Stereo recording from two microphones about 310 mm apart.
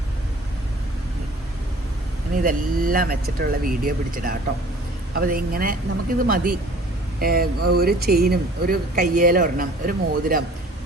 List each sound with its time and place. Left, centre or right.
2.3 s speech: right